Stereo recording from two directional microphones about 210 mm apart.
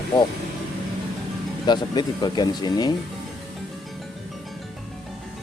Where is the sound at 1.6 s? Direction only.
20° left (ahead or behind).